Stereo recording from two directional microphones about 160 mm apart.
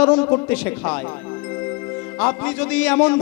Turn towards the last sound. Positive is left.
turn(degrees=5)  # may be behind; listen again after turning